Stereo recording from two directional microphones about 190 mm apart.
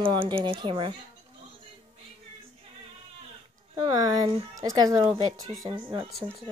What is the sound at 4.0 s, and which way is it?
Speech, 20° right (ahead or behind).